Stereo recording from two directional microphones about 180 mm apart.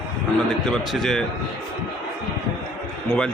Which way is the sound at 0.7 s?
Centre (ahead or behind).